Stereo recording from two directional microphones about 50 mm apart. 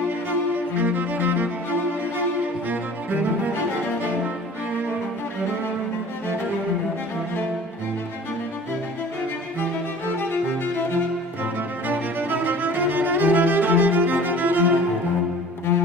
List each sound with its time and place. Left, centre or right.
0.7 s music: right
2.7 s cello: right
11.9 s music: right